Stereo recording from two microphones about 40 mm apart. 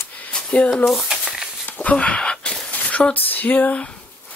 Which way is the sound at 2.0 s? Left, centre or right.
Left.